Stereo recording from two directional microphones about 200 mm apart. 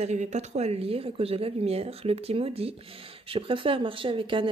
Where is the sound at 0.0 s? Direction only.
35° right (ahead or behind).